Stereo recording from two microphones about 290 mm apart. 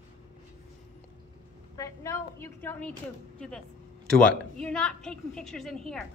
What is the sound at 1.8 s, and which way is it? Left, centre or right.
A woman's voice, centre.